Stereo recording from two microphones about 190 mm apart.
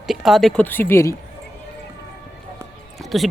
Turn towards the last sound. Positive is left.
turn(degrees=0)  # may be behind; listen again after turning